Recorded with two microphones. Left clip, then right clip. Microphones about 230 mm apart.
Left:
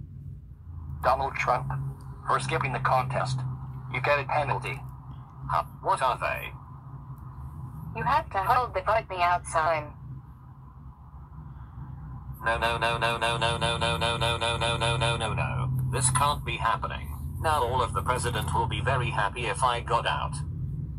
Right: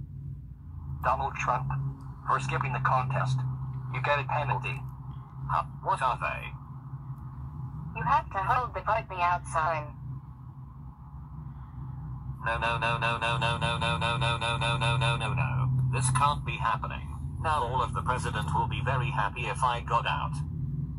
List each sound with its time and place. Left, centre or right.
1.0 s music: left
2.2 s speech: left
3.9 s music: left
7.9 s music: left
12.4 s music: left